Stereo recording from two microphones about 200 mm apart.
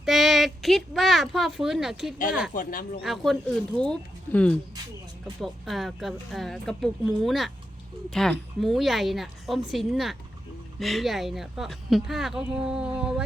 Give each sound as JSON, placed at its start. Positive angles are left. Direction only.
{"t": 0.0, "sound": "speech", "side_deg": 0}
{"t": 2.5, "sound": "speech", "side_deg": 45}
{"t": 3.0, "sound": "speech", "side_deg": 0}